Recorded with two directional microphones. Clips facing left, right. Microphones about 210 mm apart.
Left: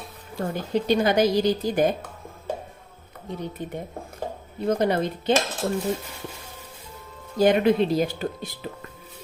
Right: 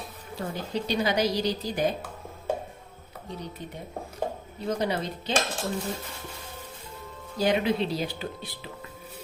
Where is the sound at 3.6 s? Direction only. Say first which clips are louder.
Left 5 dB; 50° left (ahead or behind).